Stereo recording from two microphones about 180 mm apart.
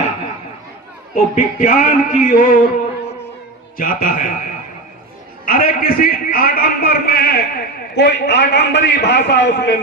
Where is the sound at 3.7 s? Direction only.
50° left (ahead or behind).